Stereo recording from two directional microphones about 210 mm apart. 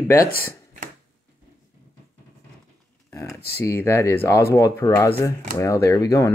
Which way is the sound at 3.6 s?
10° left (ahead or behind).